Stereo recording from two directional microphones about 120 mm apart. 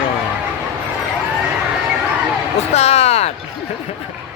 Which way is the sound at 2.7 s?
60° left (ahead or behind).